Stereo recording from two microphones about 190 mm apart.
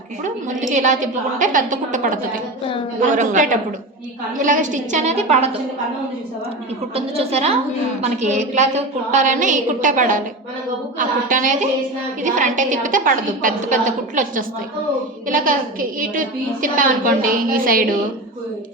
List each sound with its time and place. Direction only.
0.7 s a woman's voice: 40° right (ahead or behind)
6.9 s a woman's voice: 30° right (ahead or behind); by 17.9 s 50° right (ahead or behind)